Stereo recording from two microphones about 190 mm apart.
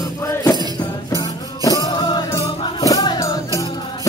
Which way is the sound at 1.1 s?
20° left (ahead or behind).